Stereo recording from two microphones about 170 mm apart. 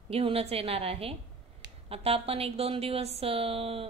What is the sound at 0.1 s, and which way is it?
Speech, 35° right (ahead or behind).